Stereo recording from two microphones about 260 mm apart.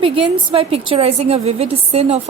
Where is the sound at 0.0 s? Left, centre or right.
Right.